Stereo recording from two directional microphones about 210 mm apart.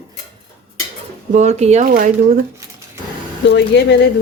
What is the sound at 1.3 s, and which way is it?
Speech, 35° right (ahead or behind).